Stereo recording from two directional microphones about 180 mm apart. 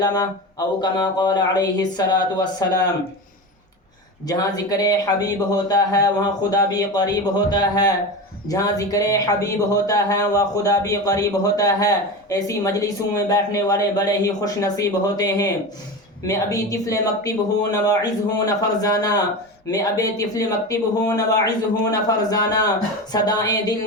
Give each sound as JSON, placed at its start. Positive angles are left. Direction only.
{"t": 0.0, "sound": "speech", "side_deg": 20}
{"t": 4.3, "sound": "speech", "side_deg": 20}